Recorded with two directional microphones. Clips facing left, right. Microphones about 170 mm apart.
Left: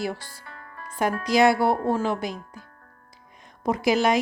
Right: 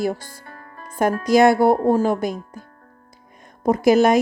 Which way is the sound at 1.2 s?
45° right (ahead or behind).